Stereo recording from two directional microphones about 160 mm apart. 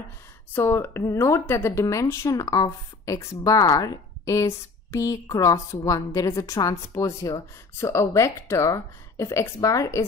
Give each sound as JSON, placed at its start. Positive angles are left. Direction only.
{"t": 0.5, "sound": "a woman's voice", "side_deg": 15}